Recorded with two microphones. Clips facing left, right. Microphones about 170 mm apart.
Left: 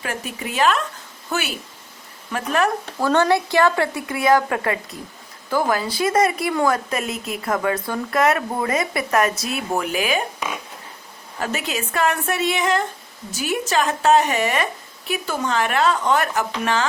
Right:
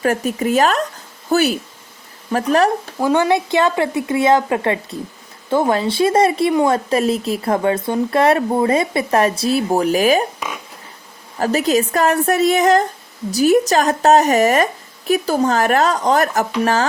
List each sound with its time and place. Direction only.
0.0 s a woman's voice: 45° right (ahead or behind)
3.0 s speech: 15° right (ahead or behind); by 10.2 s 40° right (ahead or behind)
11.3 s a woman's voice: 40° right (ahead or behind)